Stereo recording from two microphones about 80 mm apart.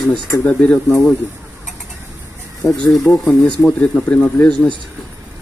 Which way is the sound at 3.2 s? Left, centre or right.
Centre.